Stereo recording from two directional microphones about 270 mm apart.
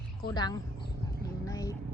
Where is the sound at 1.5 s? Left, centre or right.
Centre.